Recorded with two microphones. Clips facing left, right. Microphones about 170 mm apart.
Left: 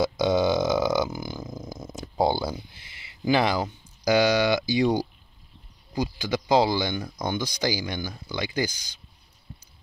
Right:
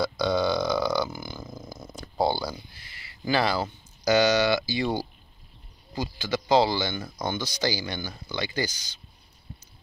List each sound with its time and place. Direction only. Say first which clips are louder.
0.0 s burping: left 3 dB; 20° left (ahead or behind)
1.5 s purr: left 3 dB; 15° left (ahead or behind)
2.7 s a sound: right 1 dB; 20° left (ahead or behind)
4.0 s speech: even; 10° left (ahead or behind)